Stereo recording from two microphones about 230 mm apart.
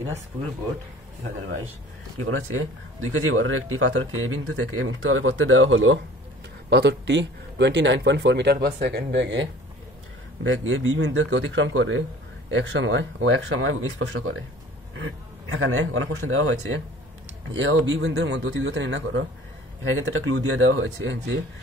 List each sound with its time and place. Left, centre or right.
2.1 s speech: right
10.4 s speech: right